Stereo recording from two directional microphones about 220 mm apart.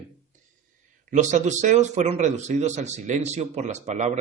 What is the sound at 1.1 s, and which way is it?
A man's voice, 35° right (ahead or behind).